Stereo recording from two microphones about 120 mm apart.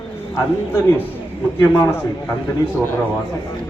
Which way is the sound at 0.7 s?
20° left (ahead or behind).